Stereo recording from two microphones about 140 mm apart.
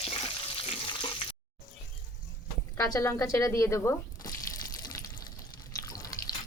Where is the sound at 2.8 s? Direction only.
20° left (ahead or behind).